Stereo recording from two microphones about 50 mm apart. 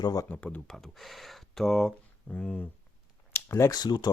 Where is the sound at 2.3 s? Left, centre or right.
Left.